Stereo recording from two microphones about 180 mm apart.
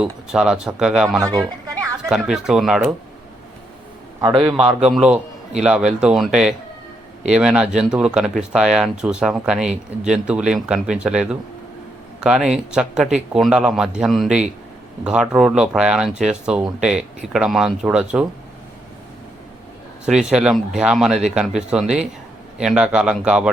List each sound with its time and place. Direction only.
0.0 s speech: 5° right (ahead or behind)
1.2 s a man's voice: 20° right (ahead or behind)
2.0 s speech: 5° right (ahead or behind)
4.2 s a man's voice: 25° right (ahead or behind)
4.9 s speech: 5° right (ahead or behind)
20.1 s speech: 5° right (ahead or behind)